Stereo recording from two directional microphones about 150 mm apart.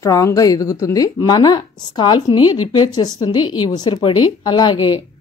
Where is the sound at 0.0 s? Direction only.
20° left (ahead or behind).